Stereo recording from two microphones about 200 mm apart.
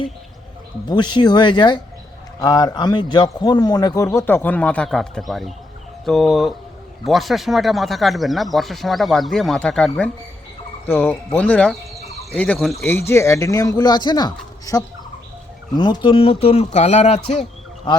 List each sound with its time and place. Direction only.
0.9 s a man's voice: 20° left (ahead or behind)